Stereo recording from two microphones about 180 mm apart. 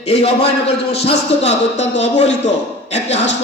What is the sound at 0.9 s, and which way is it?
A man's voice, 35° left (ahead or behind).